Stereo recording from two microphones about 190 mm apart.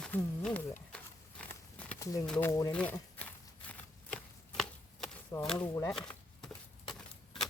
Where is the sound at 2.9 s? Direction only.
10° left (ahead or behind).